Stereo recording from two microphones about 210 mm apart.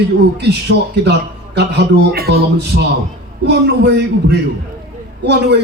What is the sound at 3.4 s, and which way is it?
A man's voice, 50° right (ahead or behind).